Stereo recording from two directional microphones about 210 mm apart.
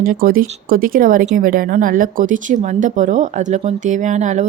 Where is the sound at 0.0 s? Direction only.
45° right (ahead or behind).